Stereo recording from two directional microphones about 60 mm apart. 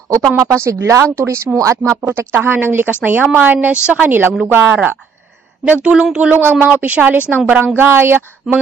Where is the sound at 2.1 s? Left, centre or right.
Right.